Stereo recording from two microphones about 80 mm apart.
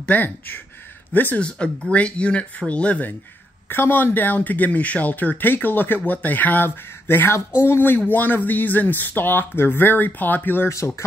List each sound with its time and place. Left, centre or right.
0.0 s speech: left